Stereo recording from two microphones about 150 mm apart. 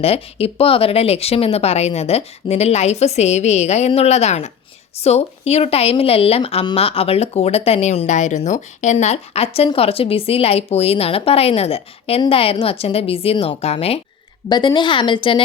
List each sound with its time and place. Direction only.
0.0 s a woman's voice: 40° left (ahead or behind)
14.5 s a woman's voice: 30° left (ahead or behind)